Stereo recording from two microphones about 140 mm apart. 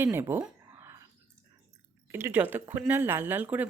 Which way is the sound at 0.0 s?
15° right (ahead or behind).